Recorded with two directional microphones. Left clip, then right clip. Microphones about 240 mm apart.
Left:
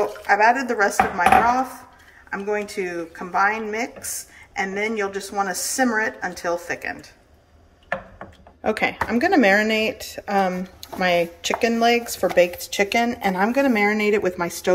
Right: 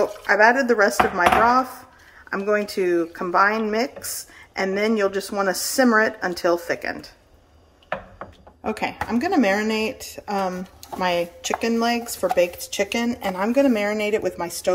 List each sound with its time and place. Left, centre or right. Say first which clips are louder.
0.3 s speech: right 1 dB; right
8.6 s speech: left 4 dB; centre